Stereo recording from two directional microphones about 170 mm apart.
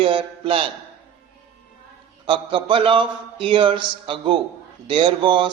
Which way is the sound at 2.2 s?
30° right (ahead or behind).